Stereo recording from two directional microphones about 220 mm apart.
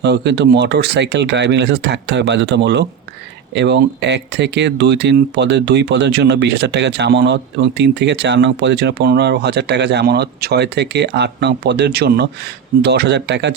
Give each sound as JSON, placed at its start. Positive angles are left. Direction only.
{"t": 0.0, "sound": "speech", "side_deg": -50}